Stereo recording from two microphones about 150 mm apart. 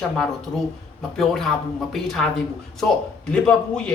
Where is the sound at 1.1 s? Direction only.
Centre (ahead or behind).